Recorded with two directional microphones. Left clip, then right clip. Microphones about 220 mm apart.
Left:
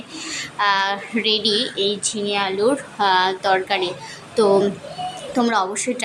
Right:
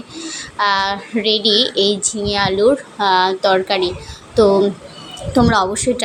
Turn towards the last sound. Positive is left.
turn(degrees=-20)  # may be behind; listen again after turning